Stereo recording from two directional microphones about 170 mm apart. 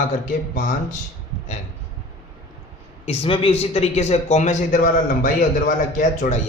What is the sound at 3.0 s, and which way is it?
A man's voice, 35° left (ahead or behind).